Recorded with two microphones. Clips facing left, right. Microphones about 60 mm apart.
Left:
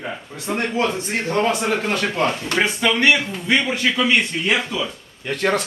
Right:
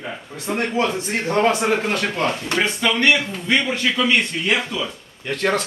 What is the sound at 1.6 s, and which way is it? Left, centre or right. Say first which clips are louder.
Speech: right 2 dB; centre.